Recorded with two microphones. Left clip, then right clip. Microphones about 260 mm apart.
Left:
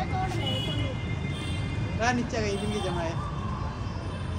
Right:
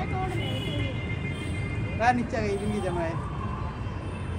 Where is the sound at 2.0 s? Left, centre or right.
Right.